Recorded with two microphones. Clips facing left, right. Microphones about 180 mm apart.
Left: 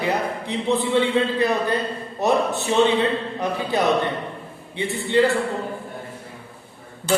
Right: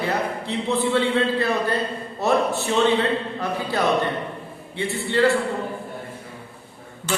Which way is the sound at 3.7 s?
20° left (ahead or behind).